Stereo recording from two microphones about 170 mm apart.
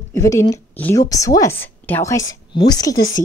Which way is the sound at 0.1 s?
15° left (ahead or behind).